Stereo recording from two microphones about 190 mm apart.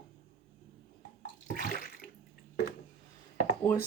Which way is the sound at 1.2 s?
45° left (ahead or behind).